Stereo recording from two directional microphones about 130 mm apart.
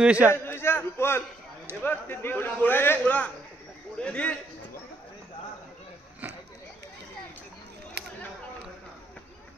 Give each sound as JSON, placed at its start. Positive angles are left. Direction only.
{"t": 0.0, "sound": "a man's voice", "side_deg": -10}
{"t": 0.3, "sound": "a man's voice", "side_deg": 15}